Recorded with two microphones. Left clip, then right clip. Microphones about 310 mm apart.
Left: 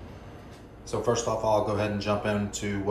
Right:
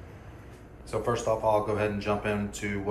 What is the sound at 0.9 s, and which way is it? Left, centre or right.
Speech, centre.